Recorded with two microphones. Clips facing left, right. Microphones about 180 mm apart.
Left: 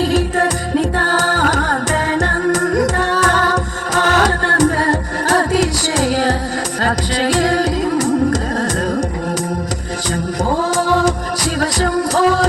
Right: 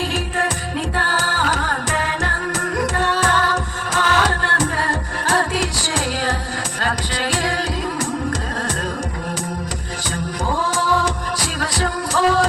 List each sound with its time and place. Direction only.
0.1 s music: 40° left (ahead or behind)
10.5 s music: 40° left (ahead or behind)